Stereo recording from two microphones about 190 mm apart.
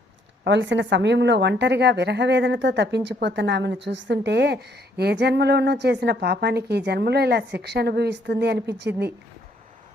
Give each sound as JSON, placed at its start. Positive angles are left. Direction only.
{"t": 0.4, "sound": "a woman's voice", "side_deg": -70}